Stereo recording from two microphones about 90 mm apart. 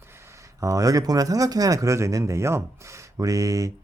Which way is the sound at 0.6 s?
40° right (ahead or behind).